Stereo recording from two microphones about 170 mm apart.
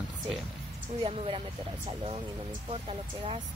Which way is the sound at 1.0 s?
35° right (ahead or behind).